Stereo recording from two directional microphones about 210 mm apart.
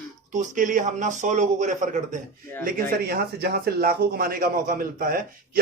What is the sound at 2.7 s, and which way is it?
Speech, 45° right (ahead or behind).